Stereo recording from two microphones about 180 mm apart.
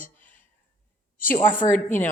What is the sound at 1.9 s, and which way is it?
Speech, 10° left (ahead or behind).